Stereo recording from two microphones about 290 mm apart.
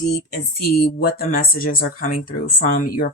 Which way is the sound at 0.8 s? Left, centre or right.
Left.